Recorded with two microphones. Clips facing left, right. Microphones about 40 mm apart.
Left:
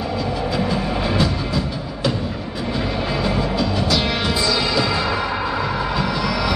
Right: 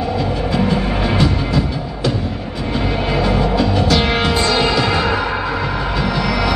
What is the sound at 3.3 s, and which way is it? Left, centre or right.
Music, right.